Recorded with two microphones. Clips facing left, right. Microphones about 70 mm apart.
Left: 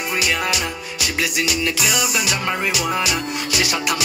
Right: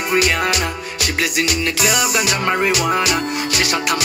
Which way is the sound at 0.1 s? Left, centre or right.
Right.